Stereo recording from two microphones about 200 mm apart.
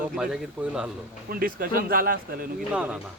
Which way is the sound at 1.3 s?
45° right (ahead or behind).